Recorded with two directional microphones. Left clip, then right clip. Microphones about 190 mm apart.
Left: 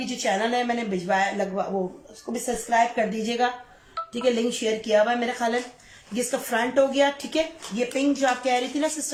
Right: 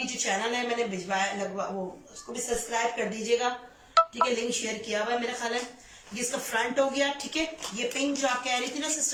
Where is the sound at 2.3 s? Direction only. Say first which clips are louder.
Left 7 dB; 45° left (ahead or behind).